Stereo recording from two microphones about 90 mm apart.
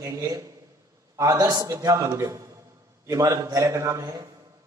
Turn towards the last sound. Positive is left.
turn(degrees=-40)  # may be behind; listen again after turning